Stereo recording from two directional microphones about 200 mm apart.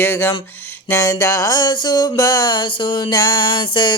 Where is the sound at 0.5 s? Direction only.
10° left (ahead or behind).